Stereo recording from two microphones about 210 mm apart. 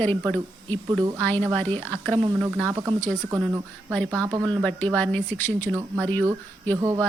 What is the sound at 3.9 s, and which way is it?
Speech, 5° left (ahead or behind).